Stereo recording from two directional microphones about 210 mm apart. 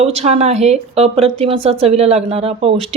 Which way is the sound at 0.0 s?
30° right (ahead or behind).